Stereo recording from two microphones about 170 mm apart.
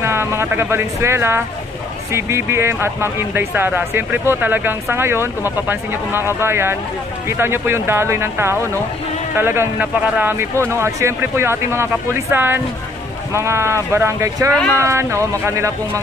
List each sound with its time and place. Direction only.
0.0 s speech: 15° right (ahead or behind)